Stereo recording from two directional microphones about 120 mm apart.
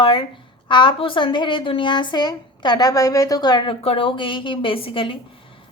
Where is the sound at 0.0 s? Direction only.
45° left (ahead or behind).